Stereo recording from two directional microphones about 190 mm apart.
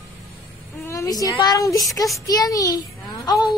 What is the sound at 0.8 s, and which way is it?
A woman's voice, 15° left (ahead or behind).